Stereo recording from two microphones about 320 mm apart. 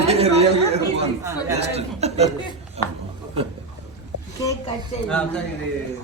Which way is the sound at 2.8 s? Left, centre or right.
Centre.